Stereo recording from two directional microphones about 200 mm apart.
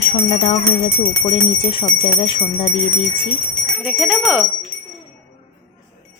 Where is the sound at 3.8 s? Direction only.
5° right (ahead or behind).